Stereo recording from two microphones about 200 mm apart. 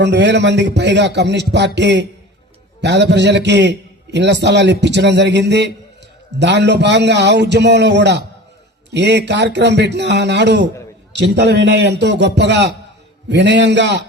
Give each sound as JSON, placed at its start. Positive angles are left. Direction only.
{"t": 0.0, "sound": "a man's voice", "side_deg": -60}